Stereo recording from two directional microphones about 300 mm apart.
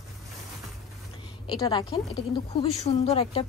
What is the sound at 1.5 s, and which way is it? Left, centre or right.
A woman's voice, centre.